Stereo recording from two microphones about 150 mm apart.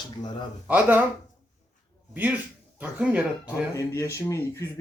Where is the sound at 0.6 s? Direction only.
10° right (ahead or behind).